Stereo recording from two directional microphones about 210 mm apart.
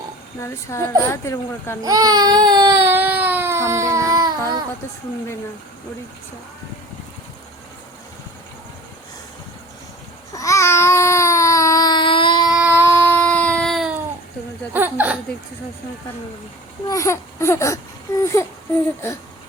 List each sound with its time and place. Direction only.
0.4 s speech: 15° left (ahead or behind)
1.8 s baby cry: 20° right (ahead or behind)
10.3 s babbling: 15° left (ahead or behind)
14.7 s hiccup: 10° right (ahead or behind)
16.9 s speech: 15° left (ahead or behind)